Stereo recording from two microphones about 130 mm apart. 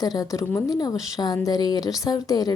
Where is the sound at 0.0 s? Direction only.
30° left (ahead or behind).